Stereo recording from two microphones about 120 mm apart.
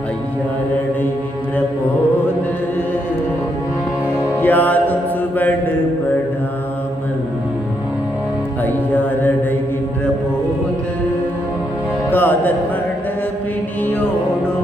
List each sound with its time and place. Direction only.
4.4 s music: 15° left (ahead or behind)
5.4 s mantra: 15° left (ahead or behind)
8.6 s mantra: 15° left (ahead or behind)
12.1 s music: 15° left (ahead or behind)
13.8 s music: 15° left (ahead or behind)